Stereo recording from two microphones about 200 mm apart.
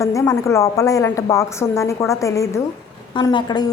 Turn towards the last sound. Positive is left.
turn(degrees=20)  # may be behind; listen again after turning